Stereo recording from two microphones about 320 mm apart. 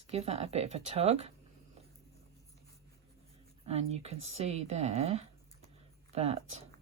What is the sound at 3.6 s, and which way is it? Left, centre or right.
Speech, centre.